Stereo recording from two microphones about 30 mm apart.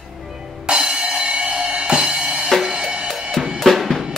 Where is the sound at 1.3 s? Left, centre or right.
Right.